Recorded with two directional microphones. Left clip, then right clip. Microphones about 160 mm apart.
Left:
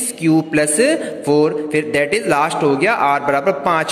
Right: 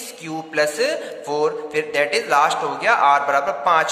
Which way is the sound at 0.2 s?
20° left (ahead or behind).